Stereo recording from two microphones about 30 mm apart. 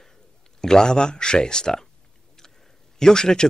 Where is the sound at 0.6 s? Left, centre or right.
Left.